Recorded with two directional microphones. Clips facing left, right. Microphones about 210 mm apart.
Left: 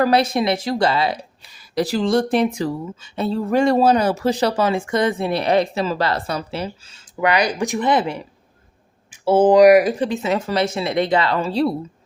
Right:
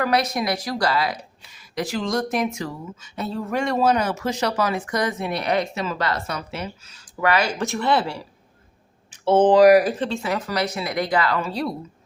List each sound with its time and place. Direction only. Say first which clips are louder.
0.0 s a woman's voice: left 5 dB; 30° left (ahead or behind)
9.2 s speech: left 2 dB; 10° left (ahead or behind); by 11.7 s 30° left (ahead or behind)